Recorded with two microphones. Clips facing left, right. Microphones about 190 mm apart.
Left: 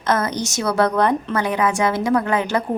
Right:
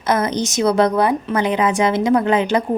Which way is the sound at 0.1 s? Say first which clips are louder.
Right 2 dB; 20° right (ahead or behind).